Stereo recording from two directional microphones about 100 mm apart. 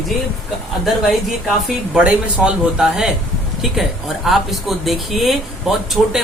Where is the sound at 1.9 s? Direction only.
10° right (ahead or behind).